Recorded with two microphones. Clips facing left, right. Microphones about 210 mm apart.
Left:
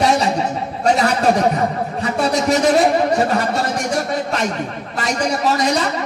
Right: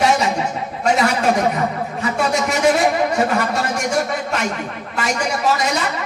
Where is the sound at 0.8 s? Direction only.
35° left (ahead or behind).